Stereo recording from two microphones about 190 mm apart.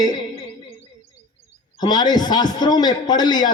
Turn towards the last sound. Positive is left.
turn(degrees=20)  # may be behind; listen again after turning